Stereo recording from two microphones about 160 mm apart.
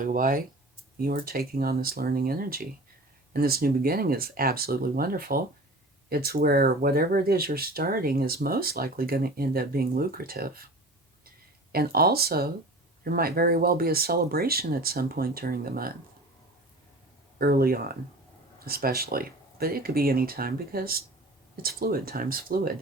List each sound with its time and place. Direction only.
0.0 s speech: 55° right (ahead or behind)
11.7 s speech: 70° right (ahead or behind)
17.3 s speech: 70° right (ahead or behind)